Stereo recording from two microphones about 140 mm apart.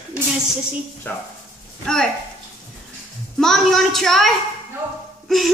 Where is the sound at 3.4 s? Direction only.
Centre (ahead or behind).